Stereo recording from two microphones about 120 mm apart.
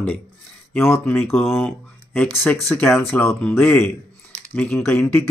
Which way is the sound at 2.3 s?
15° left (ahead or behind).